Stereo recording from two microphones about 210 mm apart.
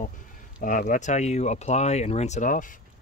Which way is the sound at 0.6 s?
40° left (ahead or behind).